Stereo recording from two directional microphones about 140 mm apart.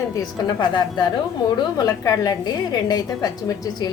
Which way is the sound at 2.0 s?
25° left (ahead or behind).